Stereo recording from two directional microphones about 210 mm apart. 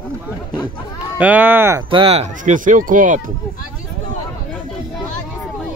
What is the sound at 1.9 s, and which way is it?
Speech, 25° right (ahead or behind).